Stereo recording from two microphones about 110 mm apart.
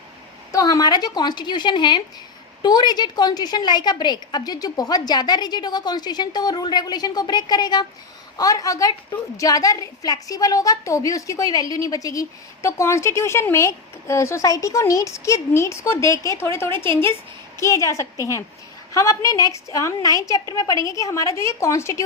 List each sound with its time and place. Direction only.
0.5 s a woman's voice: 35° left (ahead or behind)